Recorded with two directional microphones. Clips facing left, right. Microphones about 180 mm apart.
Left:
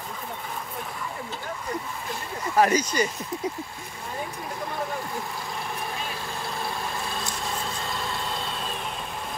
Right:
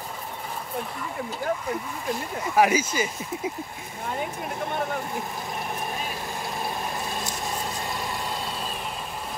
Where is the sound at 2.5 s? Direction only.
10° right (ahead or behind).